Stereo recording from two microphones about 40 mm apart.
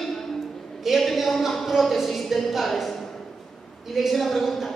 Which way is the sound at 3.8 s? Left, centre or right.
Centre.